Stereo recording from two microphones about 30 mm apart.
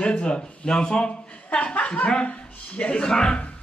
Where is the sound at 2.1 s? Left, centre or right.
Left.